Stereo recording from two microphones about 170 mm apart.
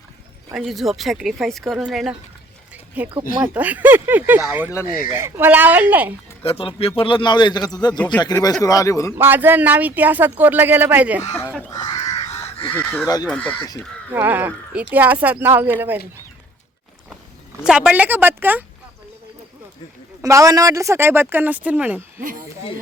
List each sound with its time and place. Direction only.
0.5 s speech: centre (ahead or behind)
3.4 s speech: 10° right (ahead or behind)
6.4 s a man's voice: 35° left (ahead or behind); by 9.1 s 20° left (ahead or behind)
9.1 s speech: 10° right (ahead or behind)
11.7 s crow: 25° left (ahead or behind)
12.3 s goose: 30° left (ahead or behind)
12.7 s speech: 10° left (ahead or behind)
14.1 s speech: 10° right (ahead or behind)
17.6 s speech: 5° right (ahead or behind)
20.2 s speech: 20° right (ahead or behind)